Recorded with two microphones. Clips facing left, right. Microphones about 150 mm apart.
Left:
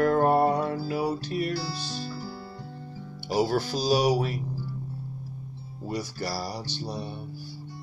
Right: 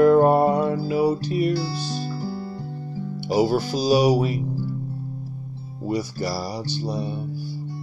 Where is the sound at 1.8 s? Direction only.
45° right (ahead or behind).